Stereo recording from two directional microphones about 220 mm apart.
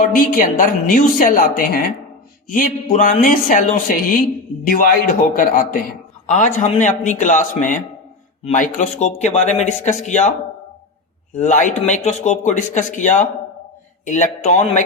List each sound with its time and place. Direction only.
0.1 s a man's voice: 40° left (ahead or behind)
11.3 s a man's voice: 35° left (ahead or behind)